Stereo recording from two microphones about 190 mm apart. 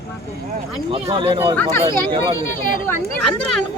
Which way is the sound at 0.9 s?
30° right (ahead or behind).